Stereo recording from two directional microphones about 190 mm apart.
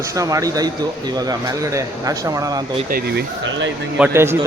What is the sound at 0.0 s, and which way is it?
A man's voice, 15° right (ahead or behind).